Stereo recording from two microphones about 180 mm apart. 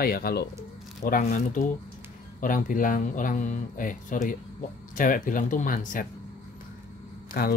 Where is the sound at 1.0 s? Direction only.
45° left (ahead or behind).